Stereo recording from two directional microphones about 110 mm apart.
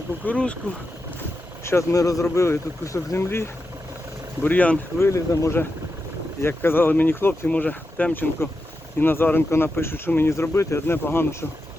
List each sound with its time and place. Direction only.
0.3 s speech: 10° left (ahead or behind)
1.6 s speech: 30° left (ahead or behind)
4.9 s speech: 25° left (ahead or behind)